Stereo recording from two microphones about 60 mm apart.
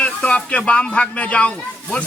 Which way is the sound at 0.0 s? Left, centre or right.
Left.